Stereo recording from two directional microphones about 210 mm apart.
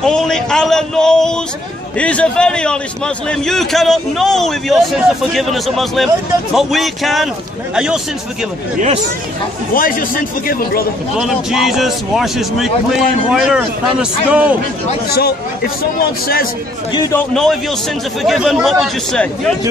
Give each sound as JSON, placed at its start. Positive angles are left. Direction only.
{"t": 0.0, "sound": "speech", "side_deg": 5}
{"t": 9.8, "sound": "a man's voice", "side_deg": 40}
{"t": 11.1, "sound": "speech", "side_deg": 0}
{"t": 15.0, "sound": "a man's voice", "side_deg": 50}
{"t": 16.9, "sound": "a man's voice", "side_deg": 15}
{"t": 17.3, "sound": "speech", "side_deg": 0}